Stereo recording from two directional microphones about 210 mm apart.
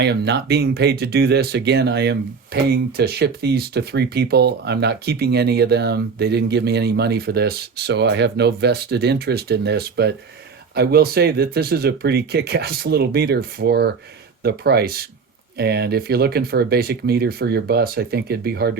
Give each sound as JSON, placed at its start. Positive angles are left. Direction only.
{"t": 0.0, "sound": "speech", "side_deg": -55}